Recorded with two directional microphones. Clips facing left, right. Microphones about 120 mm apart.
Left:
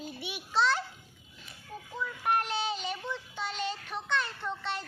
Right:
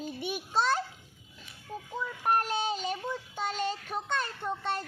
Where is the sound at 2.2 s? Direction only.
40° right (ahead or behind).